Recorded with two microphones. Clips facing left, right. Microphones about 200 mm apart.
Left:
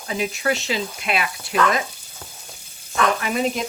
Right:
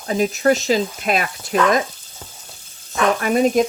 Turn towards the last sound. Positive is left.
turn(degrees=-45)  # may be behind; listen again after turning